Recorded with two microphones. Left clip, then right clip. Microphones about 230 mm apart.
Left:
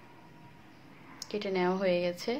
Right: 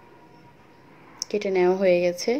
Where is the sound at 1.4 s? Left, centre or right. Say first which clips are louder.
Right 9 dB; centre.